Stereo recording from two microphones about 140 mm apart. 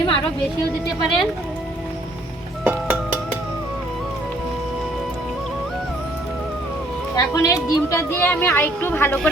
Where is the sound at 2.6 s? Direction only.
15° right (ahead or behind).